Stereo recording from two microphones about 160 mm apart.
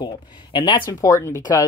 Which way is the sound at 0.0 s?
30° left (ahead or behind).